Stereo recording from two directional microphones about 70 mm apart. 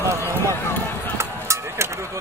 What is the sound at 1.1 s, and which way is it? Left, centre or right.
Music, right.